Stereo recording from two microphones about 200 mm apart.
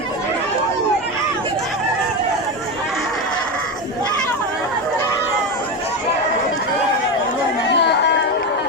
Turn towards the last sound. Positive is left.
turn(degrees=55)  # may be behind; listen again after turning